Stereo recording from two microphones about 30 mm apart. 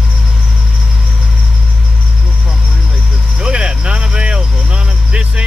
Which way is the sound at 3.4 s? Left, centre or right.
Right.